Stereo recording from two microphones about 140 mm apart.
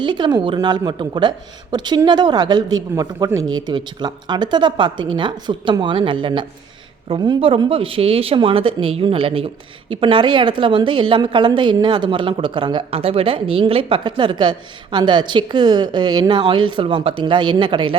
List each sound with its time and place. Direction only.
0.0 s a woman's voice: 30° right (ahead or behind)